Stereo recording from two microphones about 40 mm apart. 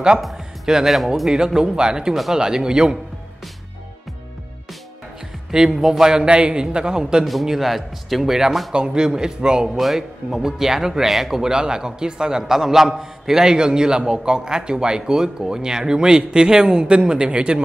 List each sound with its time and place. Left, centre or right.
0.7 s speech: centre
1.3 s a man's voice: centre
5.5 s a man's voice: centre
7.4 s speech: centre
8.7 s a man's voice: right
9.8 s a man's voice: centre; by 17.6 s right